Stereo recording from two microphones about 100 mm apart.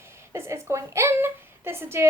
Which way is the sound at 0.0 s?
25° right (ahead or behind).